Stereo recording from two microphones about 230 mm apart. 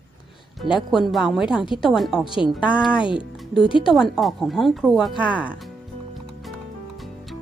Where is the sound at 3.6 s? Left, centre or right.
Left.